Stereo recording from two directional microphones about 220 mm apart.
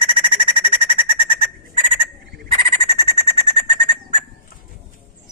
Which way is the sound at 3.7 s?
20° right (ahead or behind).